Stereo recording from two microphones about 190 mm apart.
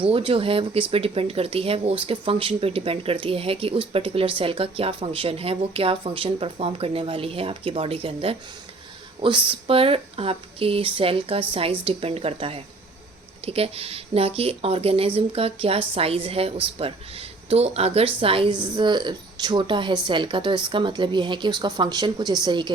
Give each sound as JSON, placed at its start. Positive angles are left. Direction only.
{"t": 0.0, "sound": "speech", "side_deg": -30}
{"t": 9.5, "sound": "speech", "side_deg": -30}